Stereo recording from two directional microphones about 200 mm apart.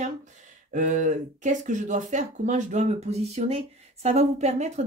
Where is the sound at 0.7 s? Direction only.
40° right (ahead or behind).